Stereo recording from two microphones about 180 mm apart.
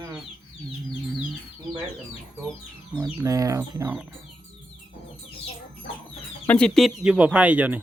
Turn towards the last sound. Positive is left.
turn(degrees=-10)  # may be behind; listen again after turning